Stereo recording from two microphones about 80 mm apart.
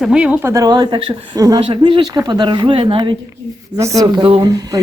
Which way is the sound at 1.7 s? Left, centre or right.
Right.